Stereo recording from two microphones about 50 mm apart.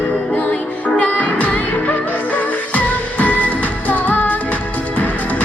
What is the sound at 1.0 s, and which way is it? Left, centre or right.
Music, left.